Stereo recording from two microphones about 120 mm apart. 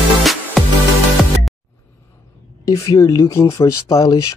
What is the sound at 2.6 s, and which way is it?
Speech, 25° left (ahead or behind).